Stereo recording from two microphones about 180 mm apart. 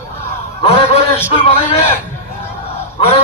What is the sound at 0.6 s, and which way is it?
A man's voice, 35° left (ahead or behind).